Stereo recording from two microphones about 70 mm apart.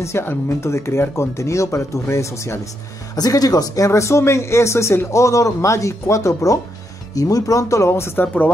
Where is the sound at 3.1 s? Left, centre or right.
Left.